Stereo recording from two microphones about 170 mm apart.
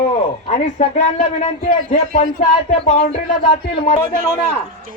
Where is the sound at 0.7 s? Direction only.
35° left (ahead or behind).